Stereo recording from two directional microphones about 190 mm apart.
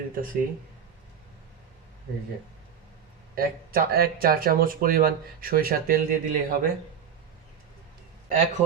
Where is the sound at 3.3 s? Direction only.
50° right (ahead or behind).